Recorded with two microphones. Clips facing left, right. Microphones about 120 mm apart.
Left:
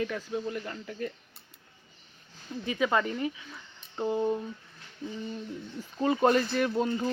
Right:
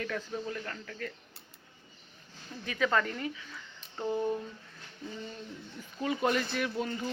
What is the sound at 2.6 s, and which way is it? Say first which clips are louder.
Speech: left 2 dB; 20° left (ahead or behind).